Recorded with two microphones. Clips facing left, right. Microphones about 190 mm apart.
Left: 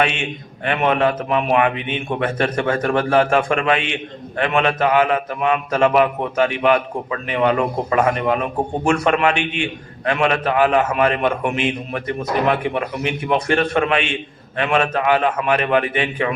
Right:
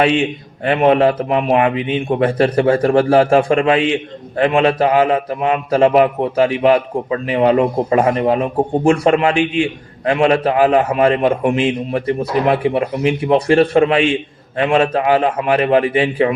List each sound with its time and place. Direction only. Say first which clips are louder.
0.0 s a man's voice: right 6 dB; 35° right (ahead or behind)